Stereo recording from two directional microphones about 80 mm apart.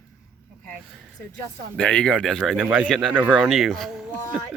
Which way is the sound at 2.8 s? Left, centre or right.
Centre.